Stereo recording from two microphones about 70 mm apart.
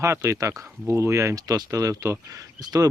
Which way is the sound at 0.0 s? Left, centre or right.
Right.